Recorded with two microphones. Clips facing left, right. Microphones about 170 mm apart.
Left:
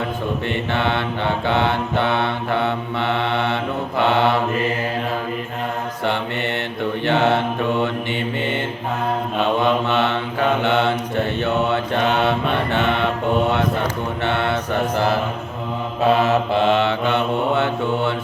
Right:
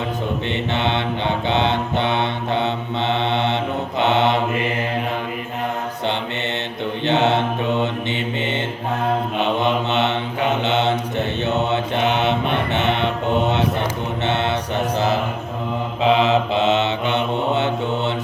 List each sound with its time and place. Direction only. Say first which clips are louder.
0.7 s mantra: even; 20° right (ahead or behind)
7.0 s mantra: even; 20° right (ahead or behind)
9.4 s mantra: left 4 dB; 20° right (ahead or behind)
14.3 s mantra: even; 20° right (ahead or behind)
16.0 s mantra: even; 20° right (ahead or behind)